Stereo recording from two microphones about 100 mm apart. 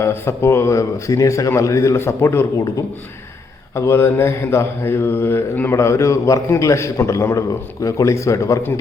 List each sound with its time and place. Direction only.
0.0 s mantra: 25° left (ahead or behind)